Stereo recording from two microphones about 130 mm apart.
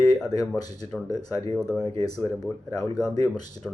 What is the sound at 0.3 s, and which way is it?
Speech, 30° left (ahead or behind).